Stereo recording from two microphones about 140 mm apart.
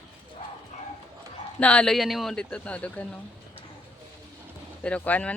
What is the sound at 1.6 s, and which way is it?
Speech, 10° left (ahead or behind).